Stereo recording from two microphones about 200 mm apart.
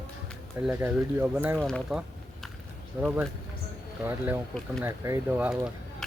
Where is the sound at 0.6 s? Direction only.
10° right (ahead or behind).